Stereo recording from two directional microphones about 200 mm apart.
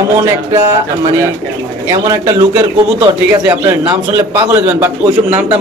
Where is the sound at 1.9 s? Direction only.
15° right (ahead or behind).